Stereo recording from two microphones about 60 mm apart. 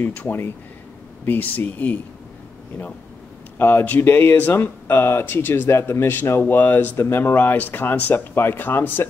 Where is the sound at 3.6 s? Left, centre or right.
Left.